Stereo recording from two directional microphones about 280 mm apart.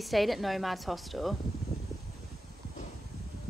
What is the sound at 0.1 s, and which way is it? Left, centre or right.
Speech, centre.